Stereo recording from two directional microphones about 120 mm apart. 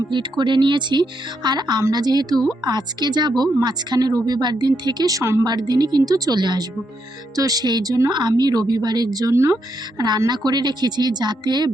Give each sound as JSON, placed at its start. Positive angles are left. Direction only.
{"t": 0.1, "sound": "speech", "side_deg": -40}
{"t": 5.5, "sound": "speech", "side_deg": -35}
{"t": 10.0, "sound": "speech", "side_deg": -35}